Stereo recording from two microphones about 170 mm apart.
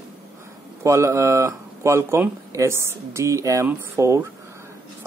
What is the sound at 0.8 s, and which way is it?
Speech, 15° right (ahead or behind).